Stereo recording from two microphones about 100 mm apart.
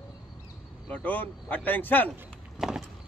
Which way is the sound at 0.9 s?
15° left (ahead or behind).